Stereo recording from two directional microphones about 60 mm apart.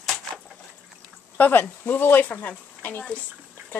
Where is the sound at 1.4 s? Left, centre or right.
Left.